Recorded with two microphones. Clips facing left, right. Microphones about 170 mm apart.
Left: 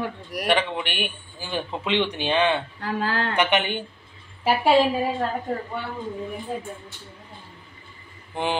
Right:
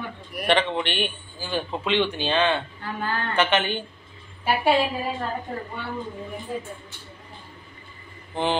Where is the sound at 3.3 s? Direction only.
15° left (ahead or behind).